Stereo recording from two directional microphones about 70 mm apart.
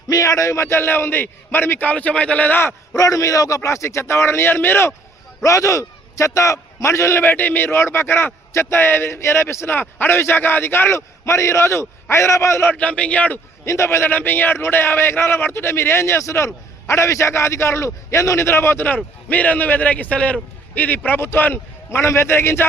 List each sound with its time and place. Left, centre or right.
0.1 s a man's voice: left; by 2.6 s centre
2.9 s a man's voice: left
5.4 s a man's voice: left
12.7 s a man's voice: centre
13.7 s a man's voice: left